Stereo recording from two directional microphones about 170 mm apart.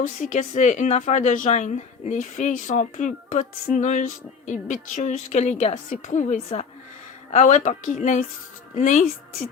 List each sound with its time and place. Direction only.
0.0 s speech: 45° left (ahead or behind)